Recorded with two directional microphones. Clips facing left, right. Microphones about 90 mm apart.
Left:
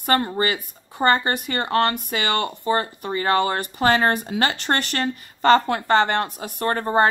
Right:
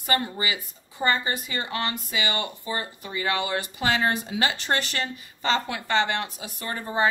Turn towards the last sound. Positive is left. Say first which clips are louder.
# left 8 dB
turn(degrees=55)  # may be behind; listen again after turning